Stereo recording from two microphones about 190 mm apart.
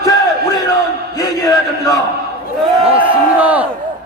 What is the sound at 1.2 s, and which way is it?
Speech, 20° left (ahead or behind).